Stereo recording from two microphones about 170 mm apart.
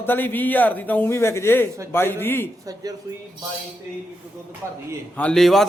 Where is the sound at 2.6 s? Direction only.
20° right (ahead or behind).